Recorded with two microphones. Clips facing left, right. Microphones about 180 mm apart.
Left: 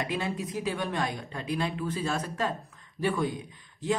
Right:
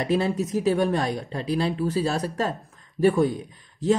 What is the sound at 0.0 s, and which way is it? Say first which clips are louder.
Speech: right 8 dB; 40° right (ahead or behind).